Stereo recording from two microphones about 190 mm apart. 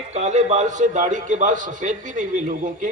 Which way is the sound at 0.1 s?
40° right (ahead or behind).